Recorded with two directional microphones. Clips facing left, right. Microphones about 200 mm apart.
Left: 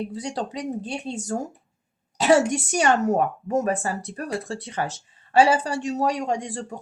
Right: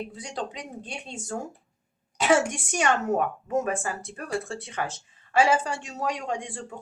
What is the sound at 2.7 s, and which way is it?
Speech, 40° left (ahead or behind).